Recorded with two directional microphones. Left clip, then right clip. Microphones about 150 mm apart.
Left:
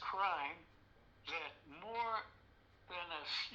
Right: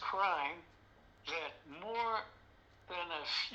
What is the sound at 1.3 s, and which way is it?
A man's voice, 25° right (ahead or behind).